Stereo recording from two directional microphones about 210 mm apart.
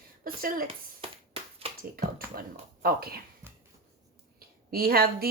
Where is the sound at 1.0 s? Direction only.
25° right (ahead or behind).